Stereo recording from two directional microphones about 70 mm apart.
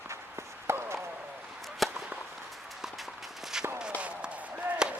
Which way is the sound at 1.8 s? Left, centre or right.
Centre.